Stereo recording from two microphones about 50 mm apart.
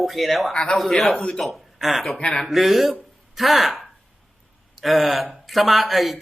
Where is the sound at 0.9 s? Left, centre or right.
Centre.